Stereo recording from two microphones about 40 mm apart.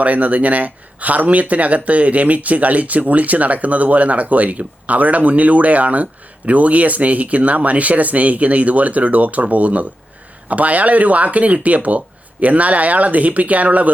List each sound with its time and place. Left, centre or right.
0.0 s speech: right